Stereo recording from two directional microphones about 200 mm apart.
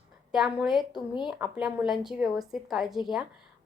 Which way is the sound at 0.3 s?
5° right (ahead or behind).